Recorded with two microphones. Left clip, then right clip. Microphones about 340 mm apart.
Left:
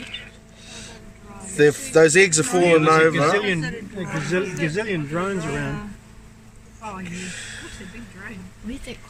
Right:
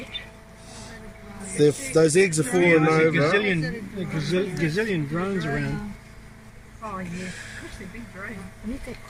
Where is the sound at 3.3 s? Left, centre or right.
Centre.